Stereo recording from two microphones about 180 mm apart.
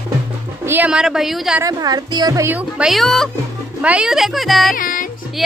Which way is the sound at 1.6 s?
20° right (ahead or behind).